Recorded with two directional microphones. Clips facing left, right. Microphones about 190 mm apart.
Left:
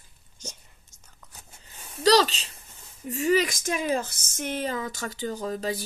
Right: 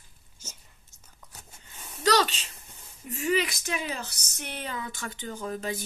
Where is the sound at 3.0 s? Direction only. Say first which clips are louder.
Left 4 dB; 35° left (ahead or behind).